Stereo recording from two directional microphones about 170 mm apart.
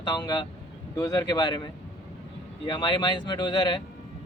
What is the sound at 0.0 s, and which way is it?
Speech, 25° left (ahead or behind).